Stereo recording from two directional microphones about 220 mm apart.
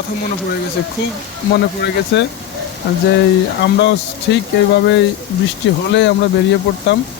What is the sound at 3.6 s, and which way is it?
Speech, 50° left (ahead or behind).